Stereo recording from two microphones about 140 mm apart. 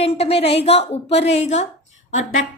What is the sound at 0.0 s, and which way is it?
A woman's voice, 45° left (ahead or behind).